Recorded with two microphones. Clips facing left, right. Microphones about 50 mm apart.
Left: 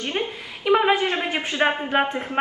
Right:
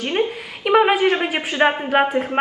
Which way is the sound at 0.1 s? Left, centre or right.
Right.